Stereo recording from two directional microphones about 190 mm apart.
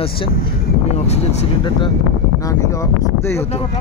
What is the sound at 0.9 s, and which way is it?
Vehicle, 35° left (ahead or behind).